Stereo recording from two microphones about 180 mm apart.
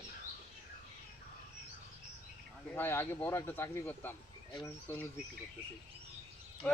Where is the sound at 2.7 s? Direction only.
10° left (ahead or behind).